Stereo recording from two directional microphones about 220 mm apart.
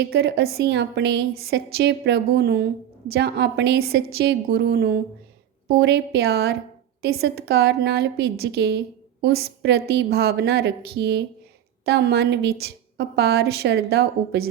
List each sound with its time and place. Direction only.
0.0 s a woman's voice: 50° right (ahead or behind)